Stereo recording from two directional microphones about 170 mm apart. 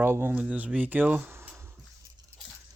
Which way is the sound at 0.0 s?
15° right (ahead or behind).